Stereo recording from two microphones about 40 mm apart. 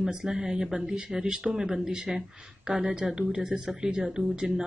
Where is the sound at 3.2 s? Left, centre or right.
Right.